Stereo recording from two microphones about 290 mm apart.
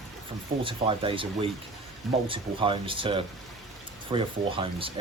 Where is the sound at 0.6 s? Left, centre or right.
Centre.